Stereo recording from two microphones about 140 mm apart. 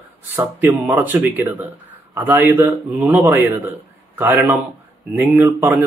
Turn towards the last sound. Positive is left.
turn(degrees=-15)  # may be behind; listen again after turning